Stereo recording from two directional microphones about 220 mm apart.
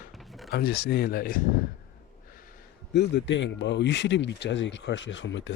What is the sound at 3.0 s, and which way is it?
Speech, 55° left (ahead or behind).